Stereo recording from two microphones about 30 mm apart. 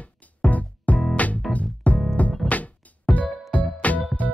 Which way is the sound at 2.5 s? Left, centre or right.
Left.